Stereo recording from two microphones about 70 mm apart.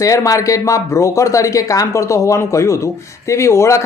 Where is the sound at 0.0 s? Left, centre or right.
Left.